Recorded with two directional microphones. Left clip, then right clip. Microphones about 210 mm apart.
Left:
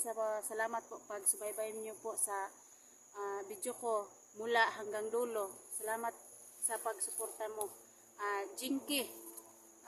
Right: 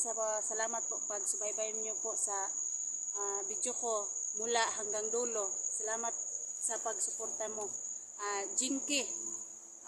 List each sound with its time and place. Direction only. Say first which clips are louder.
0.1 s speech: left 1 dB; 10° left (ahead or behind)
8.2 s speech: right 2 dB; 5° left (ahead or behind)